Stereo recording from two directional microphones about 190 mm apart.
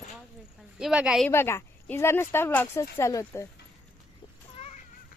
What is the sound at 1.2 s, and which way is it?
Speech, 10° left (ahead or behind).